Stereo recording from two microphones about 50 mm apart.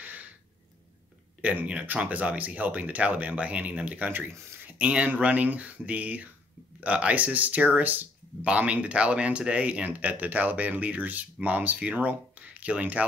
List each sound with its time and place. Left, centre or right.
1.4 s speech: right
8.5 s speech: right